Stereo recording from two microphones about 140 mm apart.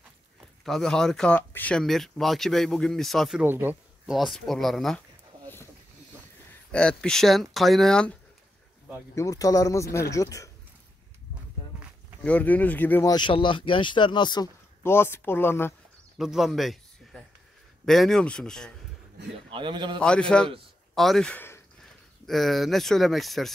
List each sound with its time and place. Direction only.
0.7 s speech: 5° left (ahead or behind)
3.4 s speech: 15° right (ahead or behind)
4.0 s speech: centre (ahead or behind)
6.7 s speech: 5° left (ahead or behind)
9.1 s speech: 25° left (ahead or behind)
12.2 s speech: 10° left (ahead or behind)
13.0 s speech: 30° left (ahead or behind)
14.8 s speech: 15° left (ahead or behind)
16.2 s a sound: centre (ahead or behind)
17.8 s speech: centre (ahead or behind)
19.5 s a man's voice: 35° right (ahead or behind)
20.0 s speech: 5° left (ahead or behind)